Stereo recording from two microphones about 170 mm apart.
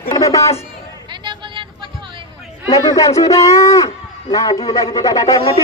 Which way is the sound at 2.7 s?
20° left (ahead or behind).